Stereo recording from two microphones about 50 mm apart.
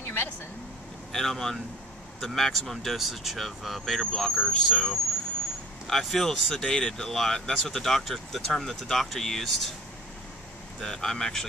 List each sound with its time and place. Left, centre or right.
0.0 s vehicle: left
1.1 s speech: centre
10.8 s speech: centre